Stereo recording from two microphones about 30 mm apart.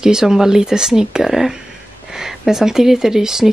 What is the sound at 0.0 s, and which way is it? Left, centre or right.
Speech, right.